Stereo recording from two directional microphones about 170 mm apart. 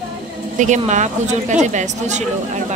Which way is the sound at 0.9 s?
45° right (ahead or behind).